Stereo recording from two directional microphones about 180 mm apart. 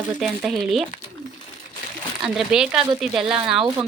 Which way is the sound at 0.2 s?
Centre (ahead or behind).